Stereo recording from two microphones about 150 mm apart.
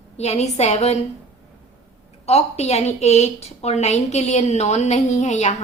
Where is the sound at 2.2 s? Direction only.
45° left (ahead or behind).